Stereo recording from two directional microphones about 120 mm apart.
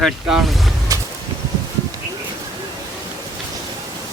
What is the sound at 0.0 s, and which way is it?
Speech, centre (ahead or behind).